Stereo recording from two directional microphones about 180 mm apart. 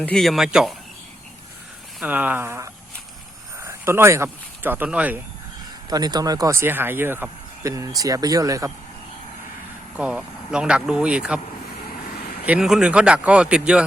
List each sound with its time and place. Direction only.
0.0 s speech: 5° left (ahead or behind)
2.0 s speech: 10° right (ahead or behind)
5.9 s speech: 20° right (ahead or behind)
10.0 s speech: 5° right (ahead or behind)
12.5 s speech: 5° right (ahead or behind)